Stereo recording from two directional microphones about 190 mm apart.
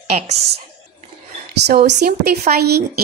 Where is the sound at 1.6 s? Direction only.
60° right (ahead or behind).